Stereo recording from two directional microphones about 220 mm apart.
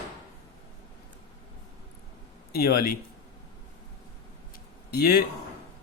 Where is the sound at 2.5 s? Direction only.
45° left (ahead or behind).